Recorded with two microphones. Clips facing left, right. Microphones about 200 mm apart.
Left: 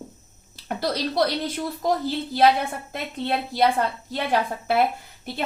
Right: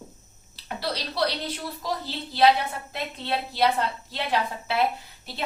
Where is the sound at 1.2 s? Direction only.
50° left (ahead or behind).